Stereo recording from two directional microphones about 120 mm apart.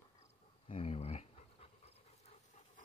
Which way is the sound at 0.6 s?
55° left (ahead or behind).